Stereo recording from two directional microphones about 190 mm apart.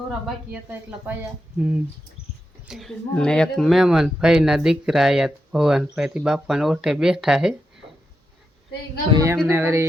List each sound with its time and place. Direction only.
0.5 s speech: 10° right (ahead or behind)
9.1 s speech: 15° right (ahead or behind)